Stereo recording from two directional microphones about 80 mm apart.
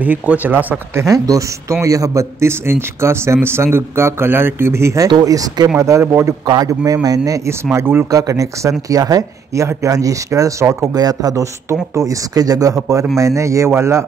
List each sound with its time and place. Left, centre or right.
0.0 s speech: centre
1.0 s a man's voice: right
5.0 s a man's voice: right
6.4 s speech: right
7.7 s speech: right
8.1 s speech: right
11.0 s a man's voice: right